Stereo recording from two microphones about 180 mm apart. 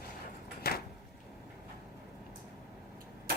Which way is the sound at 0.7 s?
60° left (ahead or behind).